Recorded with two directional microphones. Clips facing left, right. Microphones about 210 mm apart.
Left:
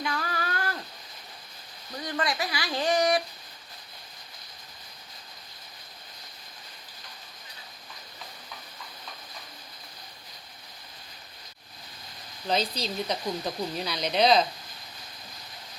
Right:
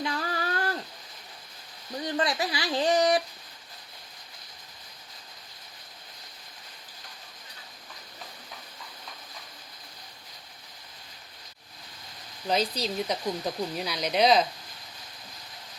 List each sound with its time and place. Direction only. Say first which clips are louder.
0.0 s a sound: right 1 dB; 30° right (ahead or behind)
2.0 s speech: right 2 dB; 30° right (ahead or behind)
12.5 s speech: right 1 dB; 10° right (ahead or behind)